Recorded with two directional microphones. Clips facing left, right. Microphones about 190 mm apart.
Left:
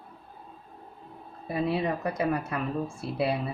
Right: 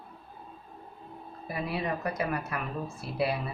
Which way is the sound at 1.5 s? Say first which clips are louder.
Left 5 dB; 25° left (ahead or behind).